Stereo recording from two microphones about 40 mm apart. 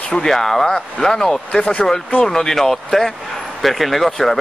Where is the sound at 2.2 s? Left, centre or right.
Centre.